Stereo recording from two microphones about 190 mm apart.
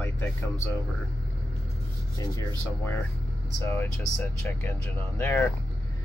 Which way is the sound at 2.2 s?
15° left (ahead or behind).